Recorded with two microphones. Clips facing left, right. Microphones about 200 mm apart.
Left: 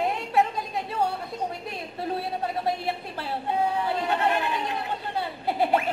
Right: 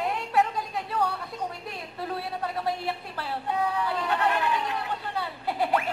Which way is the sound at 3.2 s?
25° left (ahead or behind).